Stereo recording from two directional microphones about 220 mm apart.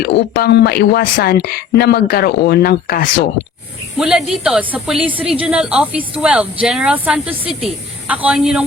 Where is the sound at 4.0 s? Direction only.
Centre (ahead or behind).